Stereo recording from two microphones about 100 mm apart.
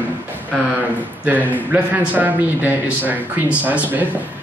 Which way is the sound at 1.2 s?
15° right (ahead or behind).